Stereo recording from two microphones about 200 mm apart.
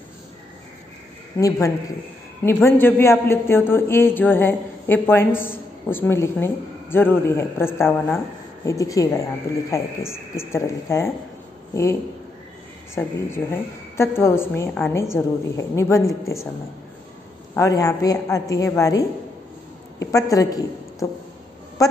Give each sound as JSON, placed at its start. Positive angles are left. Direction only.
{"t": 1.3, "sound": "a woman's voice", "side_deg": 15}
{"t": 17.6, "sound": "a woman's voice", "side_deg": 15}